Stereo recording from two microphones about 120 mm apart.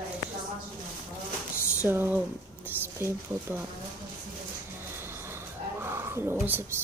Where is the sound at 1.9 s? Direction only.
15° right (ahead or behind).